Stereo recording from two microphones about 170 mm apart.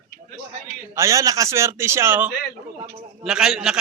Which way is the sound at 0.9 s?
20° right (ahead or behind).